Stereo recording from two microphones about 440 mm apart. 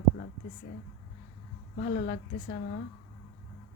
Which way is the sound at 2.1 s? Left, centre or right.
Centre.